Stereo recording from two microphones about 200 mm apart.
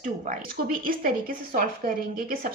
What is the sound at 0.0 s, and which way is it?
A woman's voice, 45° right (ahead or behind).